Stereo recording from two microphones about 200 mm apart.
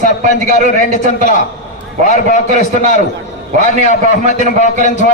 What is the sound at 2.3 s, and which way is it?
Speech, 40° left (ahead or behind).